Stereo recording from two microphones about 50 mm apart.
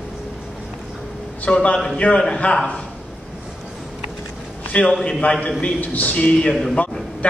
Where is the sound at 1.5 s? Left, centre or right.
Left.